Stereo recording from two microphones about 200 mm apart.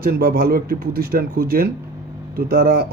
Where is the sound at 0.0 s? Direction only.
50° right (ahead or behind).